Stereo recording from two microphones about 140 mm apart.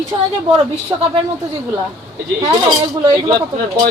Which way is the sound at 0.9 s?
25° right (ahead or behind).